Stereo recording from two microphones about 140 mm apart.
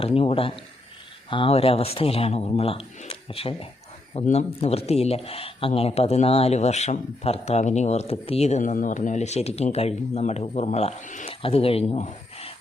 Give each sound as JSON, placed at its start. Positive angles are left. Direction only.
{"t": 0.0, "sound": "speech", "side_deg": 45}
{"t": 11.3, "sound": "speech", "side_deg": 45}